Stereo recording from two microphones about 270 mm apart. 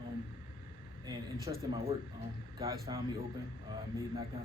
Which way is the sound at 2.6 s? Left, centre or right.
Centre.